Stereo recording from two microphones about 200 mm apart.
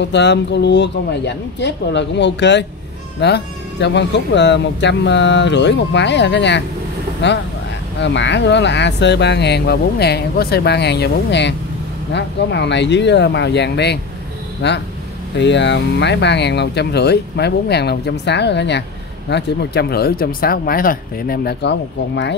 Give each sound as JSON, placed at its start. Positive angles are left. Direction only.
{"t": 0.0, "sound": "speech", "side_deg": 60}